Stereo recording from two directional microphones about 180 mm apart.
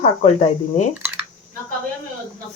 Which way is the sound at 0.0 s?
40° left (ahead or behind).